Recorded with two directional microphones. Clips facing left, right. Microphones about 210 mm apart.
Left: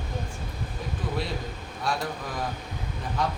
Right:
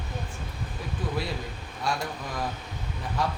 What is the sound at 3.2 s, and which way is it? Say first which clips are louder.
Speech: left 1 dB; centre (ahead or behind).